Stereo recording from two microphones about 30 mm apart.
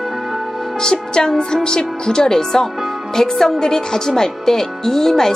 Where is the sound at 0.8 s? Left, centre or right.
Left.